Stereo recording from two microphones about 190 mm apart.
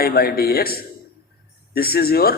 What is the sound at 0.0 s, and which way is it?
A man's voice, 55° left (ahead or behind).